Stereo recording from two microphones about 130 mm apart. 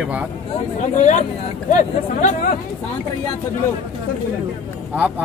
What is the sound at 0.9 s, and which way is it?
Speech, 65° left (ahead or behind).